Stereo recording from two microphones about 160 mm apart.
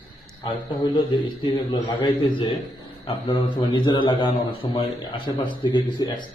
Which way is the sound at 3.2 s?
30° left (ahead or behind).